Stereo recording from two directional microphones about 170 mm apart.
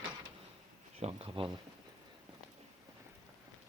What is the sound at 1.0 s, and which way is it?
Speech, 35° right (ahead or behind).